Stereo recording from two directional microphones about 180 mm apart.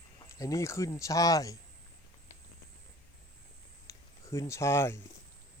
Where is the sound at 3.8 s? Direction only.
15° left (ahead or behind).